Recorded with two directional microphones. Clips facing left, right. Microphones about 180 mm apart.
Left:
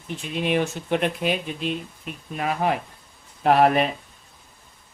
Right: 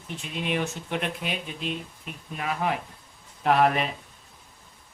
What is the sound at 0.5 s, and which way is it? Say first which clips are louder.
Speech: left 7 dB; 35° left (ahead or behind).